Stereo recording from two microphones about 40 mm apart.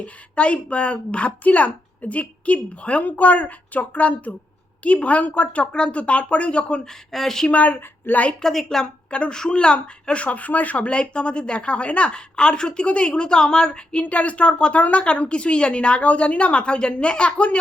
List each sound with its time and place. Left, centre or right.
0.0 s speech: left
7.1 s a woman's voice: centre
7.6 s a woman's voice: left
8.4 s a woman's voice: centre
9.0 s speech: left
10.2 s speech: left; by 14.0 s centre
14.0 s speech: left